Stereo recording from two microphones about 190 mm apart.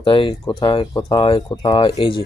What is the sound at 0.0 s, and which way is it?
Speech, 25° left (ahead or behind).